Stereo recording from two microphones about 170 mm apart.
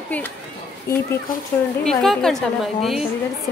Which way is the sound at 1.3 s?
55° left (ahead or behind).